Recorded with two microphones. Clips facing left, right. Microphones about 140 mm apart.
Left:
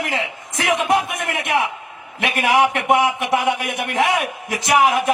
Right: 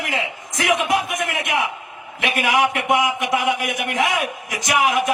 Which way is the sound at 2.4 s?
30° left (ahead or behind).